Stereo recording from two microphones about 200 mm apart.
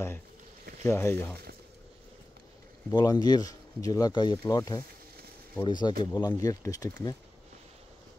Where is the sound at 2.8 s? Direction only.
20° left (ahead or behind).